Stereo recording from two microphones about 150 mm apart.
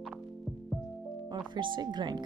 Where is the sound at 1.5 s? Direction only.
30° right (ahead or behind).